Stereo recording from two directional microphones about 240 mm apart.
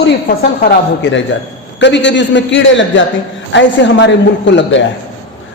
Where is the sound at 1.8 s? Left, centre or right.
Left.